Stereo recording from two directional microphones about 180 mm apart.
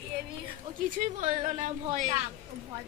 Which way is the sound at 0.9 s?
45° right (ahead or behind).